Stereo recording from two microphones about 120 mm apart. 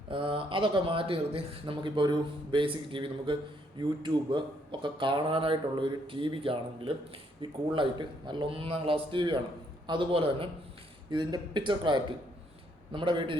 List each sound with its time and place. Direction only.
0.1 s speech: 45° right (ahead or behind)